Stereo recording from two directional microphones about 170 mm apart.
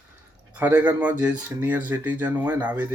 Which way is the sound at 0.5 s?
10° right (ahead or behind).